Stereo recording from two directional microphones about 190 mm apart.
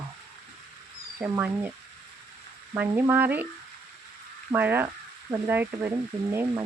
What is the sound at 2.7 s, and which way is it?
Speech, 10° right (ahead or behind).